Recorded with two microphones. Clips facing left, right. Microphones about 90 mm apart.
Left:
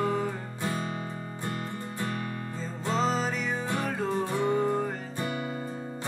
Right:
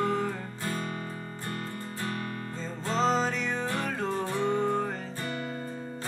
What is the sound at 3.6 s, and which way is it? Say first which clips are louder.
Music: left 1 dB; 20° left (ahead or behind).